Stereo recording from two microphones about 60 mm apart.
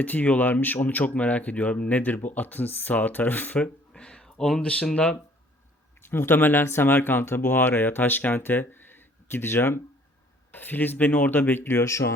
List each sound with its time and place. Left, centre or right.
0.0 s speech: left
6.0 s speech: left
11.8 s speech: left